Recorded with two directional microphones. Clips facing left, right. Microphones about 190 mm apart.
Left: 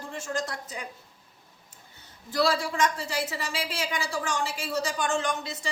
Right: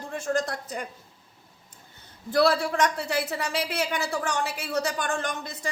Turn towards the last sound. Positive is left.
turn(degrees=-55)  # may be behind; listen again after turning